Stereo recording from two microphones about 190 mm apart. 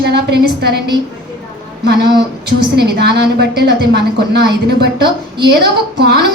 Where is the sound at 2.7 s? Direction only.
60° right (ahead or behind).